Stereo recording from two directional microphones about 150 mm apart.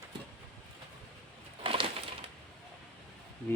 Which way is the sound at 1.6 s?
35° right (ahead or behind).